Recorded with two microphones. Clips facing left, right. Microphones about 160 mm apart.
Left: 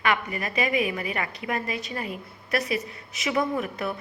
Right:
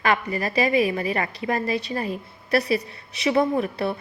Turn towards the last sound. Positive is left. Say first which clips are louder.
# right 5 dB
turn(degrees=-30)  # may be behind; listen again after turning